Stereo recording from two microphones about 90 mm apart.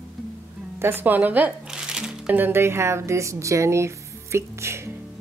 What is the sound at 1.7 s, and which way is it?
Music, 10° right (ahead or behind).